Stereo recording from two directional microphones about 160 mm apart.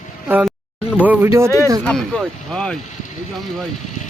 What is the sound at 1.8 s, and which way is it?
Speech, 5° left (ahead or behind).